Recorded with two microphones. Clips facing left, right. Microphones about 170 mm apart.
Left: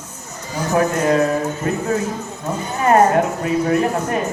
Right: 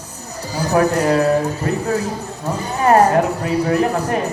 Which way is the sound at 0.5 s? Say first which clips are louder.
Right 2 dB; 35° right (ahead or behind).